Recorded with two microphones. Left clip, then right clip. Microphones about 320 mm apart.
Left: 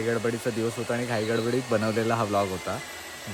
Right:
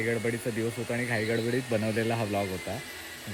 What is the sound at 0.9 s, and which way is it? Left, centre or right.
Speech, centre.